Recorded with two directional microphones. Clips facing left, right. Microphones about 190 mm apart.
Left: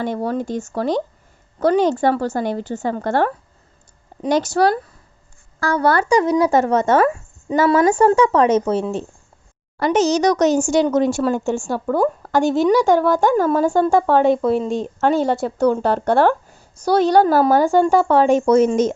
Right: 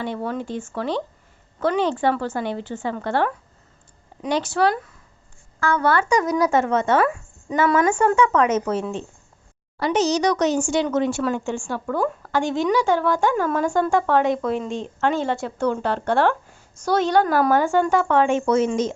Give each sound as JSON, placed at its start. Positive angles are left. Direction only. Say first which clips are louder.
{"t": 0.0, "sound": "speech", "louder": "left 5 dB", "side_deg": 40}
{"t": 9.7, "sound": "speech", "louder": "left 4 dB", "side_deg": 50}